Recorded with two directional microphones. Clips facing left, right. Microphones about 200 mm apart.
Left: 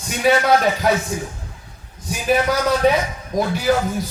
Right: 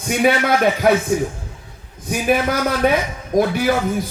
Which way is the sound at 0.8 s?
55° right (ahead or behind).